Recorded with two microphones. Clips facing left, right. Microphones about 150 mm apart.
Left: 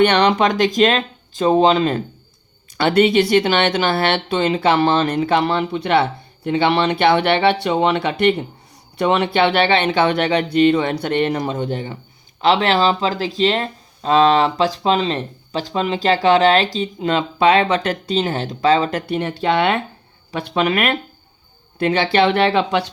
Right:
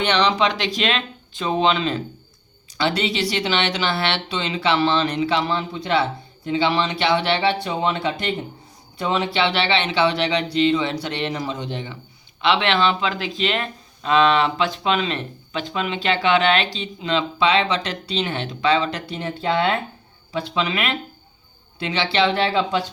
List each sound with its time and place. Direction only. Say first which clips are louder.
0.0 s speech: left 5 dB; 55° left (ahead or behind)
2.7 s speech: left 8 dB; 55° left (ahead or behind); by 19.8 s 75° left (ahead or behind)
20.3 s speech: left 5 dB; 60° left (ahead or behind)